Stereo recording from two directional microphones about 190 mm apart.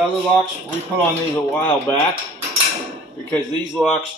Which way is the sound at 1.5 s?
10° left (ahead or behind).